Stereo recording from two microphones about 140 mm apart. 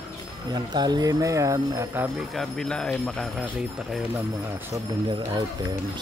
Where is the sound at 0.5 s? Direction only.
30° right (ahead or behind).